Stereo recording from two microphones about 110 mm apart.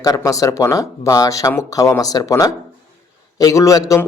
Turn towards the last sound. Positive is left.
turn(degrees=30)  # may be behind; listen again after turning